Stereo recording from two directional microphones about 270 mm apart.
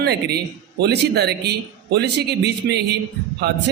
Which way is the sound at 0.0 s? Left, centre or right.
Right.